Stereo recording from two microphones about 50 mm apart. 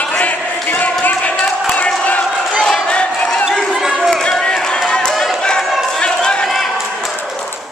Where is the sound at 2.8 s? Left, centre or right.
Left.